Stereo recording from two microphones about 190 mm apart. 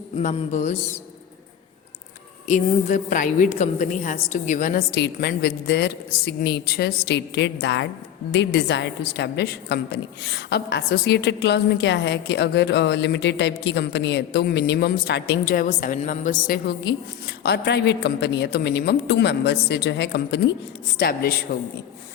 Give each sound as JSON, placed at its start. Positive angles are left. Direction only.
{"t": 0.2, "sound": "a woman's voice", "side_deg": 40}
{"t": 2.5, "sound": "a woman's voice", "side_deg": 40}
{"t": 4.9, "sound": "a woman's voice", "side_deg": 60}
{"t": 21.0, "sound": "a woman's voice", "side_deg": 50}